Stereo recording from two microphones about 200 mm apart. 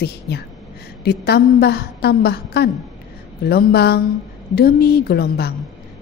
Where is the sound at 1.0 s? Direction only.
55° left (ahead or behind).